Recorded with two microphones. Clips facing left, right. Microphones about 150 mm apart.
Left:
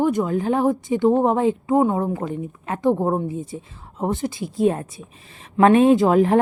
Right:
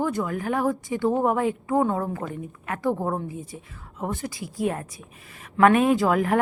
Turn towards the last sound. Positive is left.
turn(degrees=25)  # may be behind; listen again after turning